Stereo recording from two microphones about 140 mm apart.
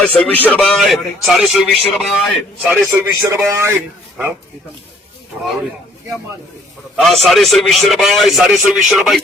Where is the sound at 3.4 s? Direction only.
20° right (ahead or behind).